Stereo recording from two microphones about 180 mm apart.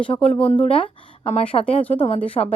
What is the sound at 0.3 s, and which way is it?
A woman's voice, 30° left (ahead or behind).